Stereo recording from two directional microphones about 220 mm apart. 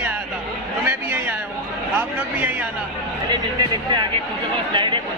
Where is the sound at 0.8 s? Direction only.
10° right (ahead or behind).